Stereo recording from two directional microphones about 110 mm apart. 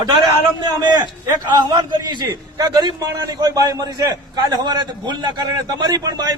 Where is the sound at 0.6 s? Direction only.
40° right (ahead or behind).